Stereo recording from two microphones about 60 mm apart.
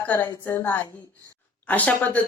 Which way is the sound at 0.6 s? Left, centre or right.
Left.